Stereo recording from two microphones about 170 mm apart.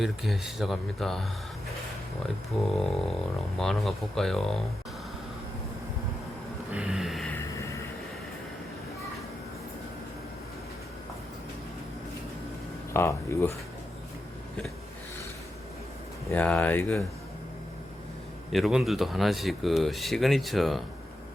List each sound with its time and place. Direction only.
0.0 s speech: centre (ahead or behind)
2.6 s speech: 5° left (ahead or behind)
6.7 s a sound: 5° right (ahead or behind)
12.9 s speech: 15° left (ahead or behind)
16.3 s speech: 10° left (ahead or behind)
18.5 s speech: centre (ahead or behind)